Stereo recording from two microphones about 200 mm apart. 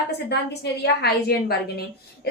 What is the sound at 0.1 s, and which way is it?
A woman's voice, 55° left (ahead or behind).